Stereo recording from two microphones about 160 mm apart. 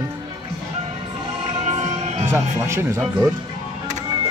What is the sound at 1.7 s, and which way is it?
Music, 40° right (ahead or behind).